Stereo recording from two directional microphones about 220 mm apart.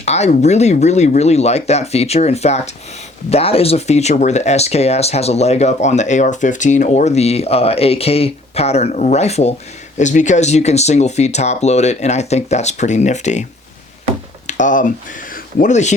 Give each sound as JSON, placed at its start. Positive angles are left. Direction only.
{"t": 0.0, "sound": "speech", "side_deg": 30}
{"t": 14.4, "sound": "speech", "side_deg": 35}